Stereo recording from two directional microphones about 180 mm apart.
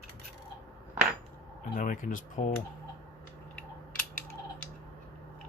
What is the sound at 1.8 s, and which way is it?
Speech, 45° left (ahead or behind).